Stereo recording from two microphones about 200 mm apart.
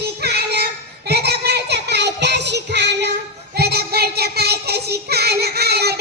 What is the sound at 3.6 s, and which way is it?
Child singing, 50° right (ahead or behind).